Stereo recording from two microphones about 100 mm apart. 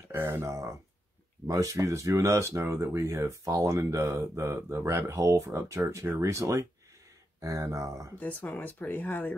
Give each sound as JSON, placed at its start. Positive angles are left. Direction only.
{"t": 0.1, "sound": "speech", "side_deg": -20}
{"t": 8.2, "sound": "speech", "side_deg": 15}